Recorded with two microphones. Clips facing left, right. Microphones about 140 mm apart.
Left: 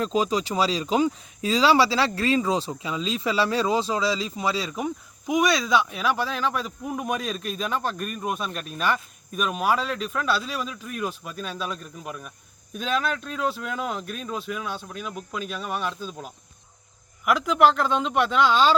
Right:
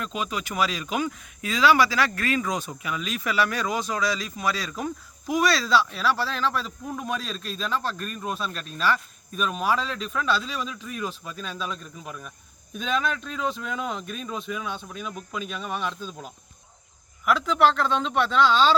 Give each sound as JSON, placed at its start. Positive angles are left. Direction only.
{"t": 0.0, "sound": "speech", "side_deg": 35}